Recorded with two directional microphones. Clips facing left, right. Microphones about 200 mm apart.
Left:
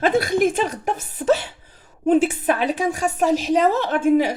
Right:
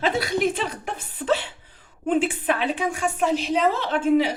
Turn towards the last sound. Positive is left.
turn(degrees=50)  # may be behind; listen again after turning